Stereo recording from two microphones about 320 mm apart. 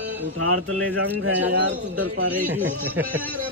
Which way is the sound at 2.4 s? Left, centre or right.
Centre.